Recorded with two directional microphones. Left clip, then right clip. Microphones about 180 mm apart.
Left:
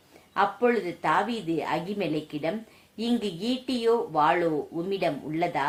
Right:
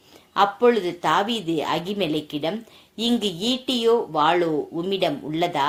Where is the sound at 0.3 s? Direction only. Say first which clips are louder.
Right 6 dB; 35° right (ahead or behind).